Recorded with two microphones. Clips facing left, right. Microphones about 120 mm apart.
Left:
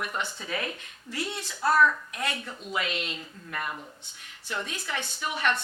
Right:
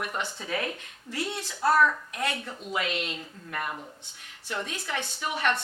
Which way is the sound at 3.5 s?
40° right (ahead or behind).